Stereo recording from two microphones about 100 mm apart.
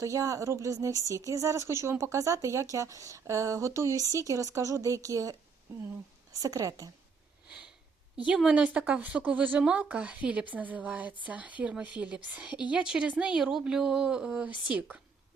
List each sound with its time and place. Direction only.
0.0 s speech: 35° right (ahead or behind)
6.4 s speech: 35° right (ahead or behind)
8.4 s a woman's voice: 10° right (ahead or behind)